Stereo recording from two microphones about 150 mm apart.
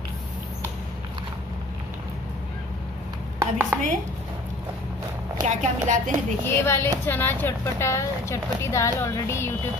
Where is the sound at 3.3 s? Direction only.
15° right (ahead or behind).